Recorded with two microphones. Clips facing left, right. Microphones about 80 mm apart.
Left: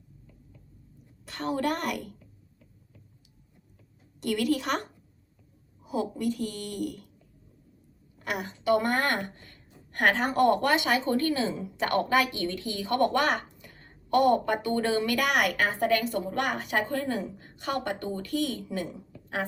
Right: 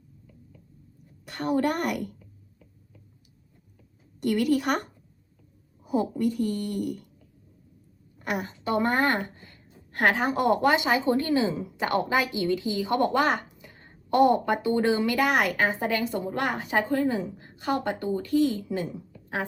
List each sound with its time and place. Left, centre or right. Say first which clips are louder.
1.4 s a woman's voice: right 5 dB; right
5.9 s speech: right 4 dB; right
8.2 s a woman's voice: right 1 dB; right